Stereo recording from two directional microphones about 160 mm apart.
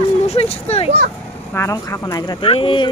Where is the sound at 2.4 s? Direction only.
35° left (ahead or behind).